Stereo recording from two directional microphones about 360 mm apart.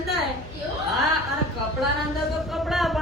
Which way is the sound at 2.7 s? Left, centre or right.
Centre.